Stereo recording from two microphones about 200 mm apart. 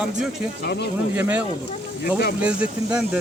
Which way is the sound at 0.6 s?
55° left (ahead or behind).